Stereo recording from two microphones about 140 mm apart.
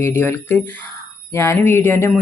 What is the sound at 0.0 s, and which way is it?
A woman's voice, 15° left (ahead or behind).